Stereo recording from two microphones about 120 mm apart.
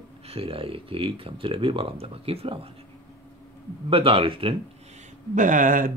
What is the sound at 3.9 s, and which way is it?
Speech, 50° right (ahead or behind).